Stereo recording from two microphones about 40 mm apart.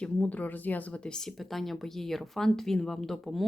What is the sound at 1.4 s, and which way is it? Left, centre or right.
Speech, centre.